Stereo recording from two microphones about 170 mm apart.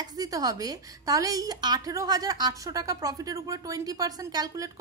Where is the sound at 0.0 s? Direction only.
20° right (ahead or behind).